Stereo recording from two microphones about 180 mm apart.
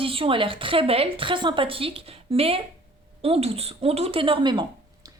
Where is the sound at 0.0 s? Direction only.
30° right (ahead or behind).